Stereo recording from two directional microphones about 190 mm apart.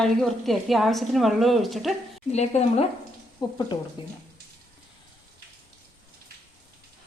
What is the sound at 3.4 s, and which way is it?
Speech, 20° left (ahead or behind).